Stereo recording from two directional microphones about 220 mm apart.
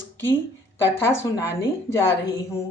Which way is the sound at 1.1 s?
10° left (ahead or behind).